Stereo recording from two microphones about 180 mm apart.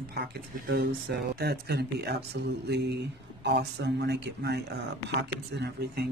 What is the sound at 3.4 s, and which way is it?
Speech, 70° right (ahead or behind).